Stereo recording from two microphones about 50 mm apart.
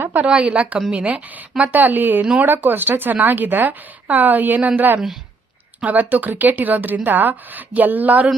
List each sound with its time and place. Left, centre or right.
0.0 s a sound: right
0.3 s a woman's voice: right
5.8 s speech: right